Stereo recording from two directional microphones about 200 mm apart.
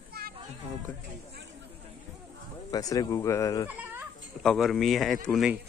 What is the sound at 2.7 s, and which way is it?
Speech, 20° left (ahead or behind).